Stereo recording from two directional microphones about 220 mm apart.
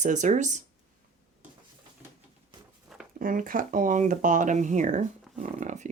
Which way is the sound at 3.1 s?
40° right (ahead or behind).